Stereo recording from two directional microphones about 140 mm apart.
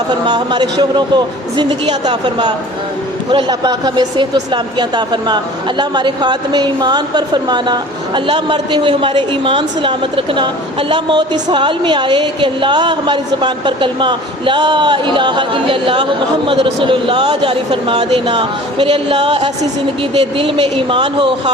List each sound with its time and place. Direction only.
0.3 s speech: 30° right (ahead or behind)